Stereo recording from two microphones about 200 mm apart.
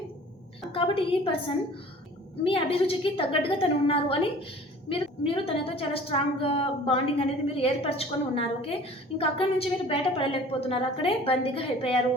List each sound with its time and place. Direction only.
0.7 s a woman's voice: 25° left (ahead or behind)